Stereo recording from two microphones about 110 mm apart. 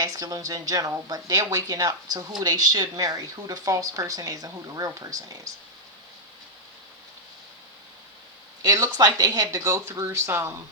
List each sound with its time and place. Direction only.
0.0 s speech: 35° right (ahead or behind)
8.6 s speech: 35° right (ahead or behind)